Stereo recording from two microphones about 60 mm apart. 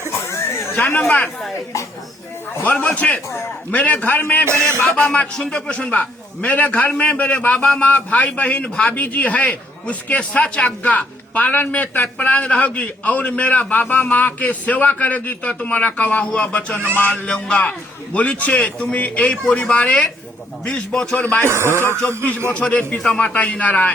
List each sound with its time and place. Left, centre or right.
0.3 s a sound: left
2.6 s a man's voice: left
4.4 s speech: right
4.9 s a man's voice: left
17.2 s speech: centre
17.6 s a man's voice: left
21.2 s a man's voice: left
21.5 s speech: right
22.5 s a man's voice: left